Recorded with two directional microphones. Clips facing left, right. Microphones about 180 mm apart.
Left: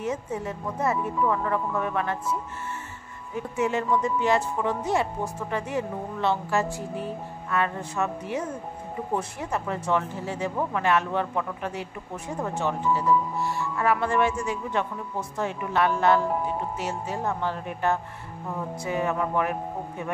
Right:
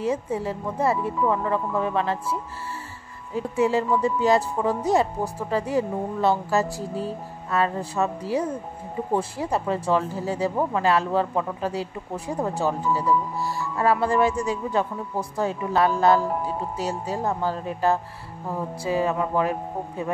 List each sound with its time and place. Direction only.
0.0 s speech: 30° right (ahead or behind)
3.3 s speech: 30° right (ahead or behind)
16.2 s speech: centre (ahead or behind)
16.7 s speech: 35° right (ahead or behind)